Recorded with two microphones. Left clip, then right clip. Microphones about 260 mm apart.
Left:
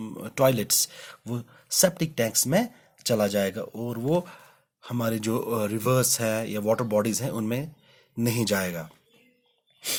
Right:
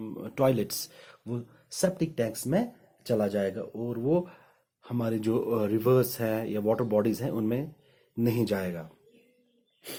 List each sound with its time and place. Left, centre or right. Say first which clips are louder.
0.0 s speech: left 4 dB; left